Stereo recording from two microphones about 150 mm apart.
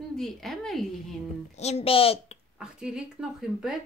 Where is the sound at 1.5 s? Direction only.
45° left (ahead or behind).